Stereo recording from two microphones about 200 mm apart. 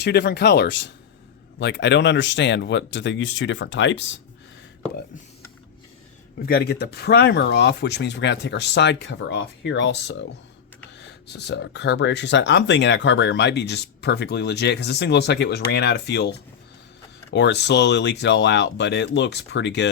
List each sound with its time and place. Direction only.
0.0 s speech: 55° left (ahead or behind)
6.4 s speech: 50° left (ahead or behind)
17.3 s speech: 60° left (ahead or behind)